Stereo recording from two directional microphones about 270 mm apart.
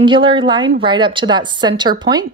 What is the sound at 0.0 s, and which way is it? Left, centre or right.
A woman's voice, centre.